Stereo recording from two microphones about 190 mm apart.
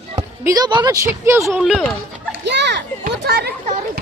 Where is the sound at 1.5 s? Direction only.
Centre (ahead or behind).